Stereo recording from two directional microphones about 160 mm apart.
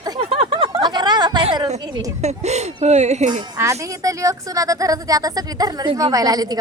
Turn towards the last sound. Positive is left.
turn(degrees=-25)  # may be behind; listen again after turning